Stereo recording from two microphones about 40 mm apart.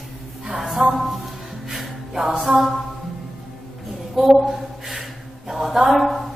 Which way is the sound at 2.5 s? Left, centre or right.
Centre.